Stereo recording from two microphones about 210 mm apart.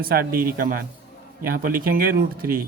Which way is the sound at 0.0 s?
45° right (ahead or behind).